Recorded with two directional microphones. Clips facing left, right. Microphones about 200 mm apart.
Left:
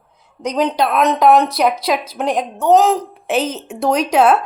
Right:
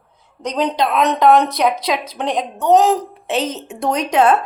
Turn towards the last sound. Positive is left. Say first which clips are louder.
# left 2 dB
turn(degrees=5)  # may be behind; listen again after turning